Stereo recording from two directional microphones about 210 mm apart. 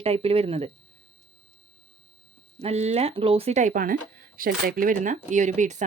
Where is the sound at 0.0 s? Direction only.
30° right (ahead or behind).